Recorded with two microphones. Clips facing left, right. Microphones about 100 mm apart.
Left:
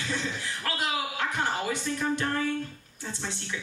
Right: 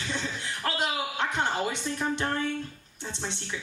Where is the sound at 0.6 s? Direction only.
25° right (ahead or behind).